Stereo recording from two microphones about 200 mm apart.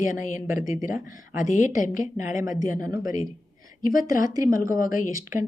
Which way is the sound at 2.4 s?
15° right (ahead or behind).